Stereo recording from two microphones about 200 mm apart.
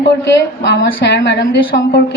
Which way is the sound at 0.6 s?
60° left (ahead or behind).